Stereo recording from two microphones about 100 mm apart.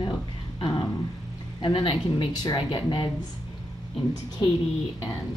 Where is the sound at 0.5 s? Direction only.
50° left (ahead or behind).